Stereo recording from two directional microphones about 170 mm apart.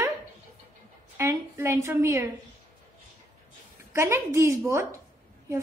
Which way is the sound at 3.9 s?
15° right (ahead or behind).